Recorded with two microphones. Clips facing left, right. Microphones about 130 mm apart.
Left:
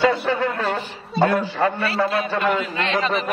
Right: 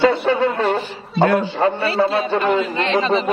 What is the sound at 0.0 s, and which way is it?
A man's voice, 25° right (ahead or behind).